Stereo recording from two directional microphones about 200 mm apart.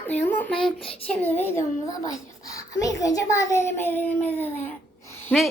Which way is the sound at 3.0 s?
15° left (ahead or behind).